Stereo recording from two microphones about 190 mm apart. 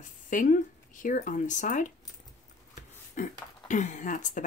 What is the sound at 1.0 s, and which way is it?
Speech, 45° left (ahead or behind).